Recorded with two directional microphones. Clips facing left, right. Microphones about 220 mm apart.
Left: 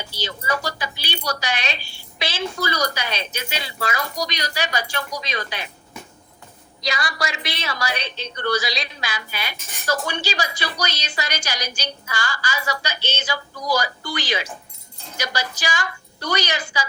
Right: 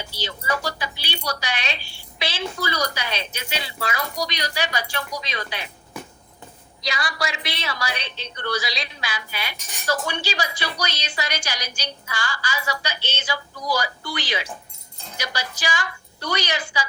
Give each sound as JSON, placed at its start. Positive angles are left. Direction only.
{"t": 0.1, "sound": "a woman's voice", "side_deg": 45}
{"t": 6.8, "sound": "a woman's voice", "side_deg": 45}